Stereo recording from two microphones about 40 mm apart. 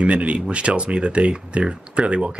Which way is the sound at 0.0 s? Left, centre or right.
Right.